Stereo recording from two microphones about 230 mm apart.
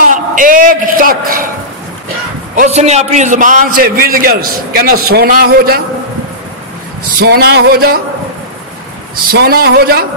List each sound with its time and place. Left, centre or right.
0.0 s a sound: right
2.5 s a man's voice: right
7.2 s music: right
9.1 s a man's voice: right